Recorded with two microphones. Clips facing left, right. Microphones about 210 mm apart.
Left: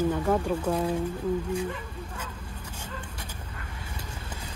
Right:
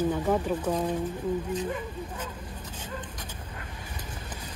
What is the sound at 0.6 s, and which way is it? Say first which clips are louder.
Speech: left 1 dB; 10° left (ahead or behind).